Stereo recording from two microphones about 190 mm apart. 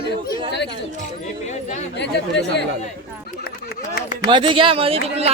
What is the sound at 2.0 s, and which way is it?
Speech, 65° left (ahead or behind).